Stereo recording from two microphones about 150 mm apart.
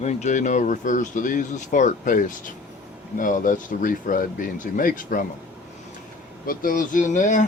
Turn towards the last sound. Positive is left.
turn(degrees=55)  # may be behind; listen again after turning